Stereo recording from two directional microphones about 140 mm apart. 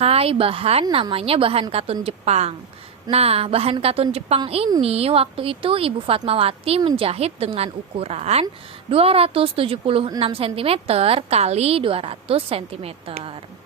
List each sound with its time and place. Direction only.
0.0 s a woman's voice: 45° right (ahead or behind)